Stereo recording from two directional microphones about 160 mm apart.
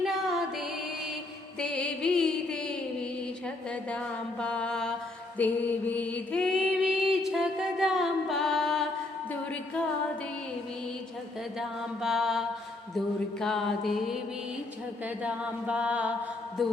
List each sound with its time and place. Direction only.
0.0 s music: centre (ahead or behind)
9.3 s a sound: 5° left (ahead or behind)
11.5 s mantra: 5° right (ahead or behind)
15.0 s a capella: 10° right (ahead or behind)
16.6 s mantra: centre (ahead or behind)